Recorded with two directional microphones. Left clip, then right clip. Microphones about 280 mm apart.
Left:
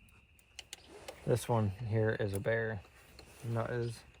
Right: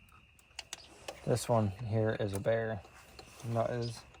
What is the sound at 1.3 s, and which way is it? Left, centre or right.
Speech, centre.